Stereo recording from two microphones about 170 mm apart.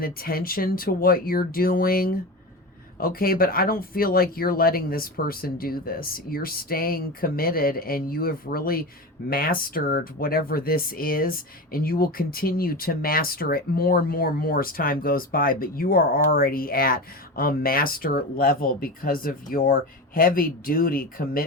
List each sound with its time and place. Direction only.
0.0 s speech: 60° left (ahead or behind)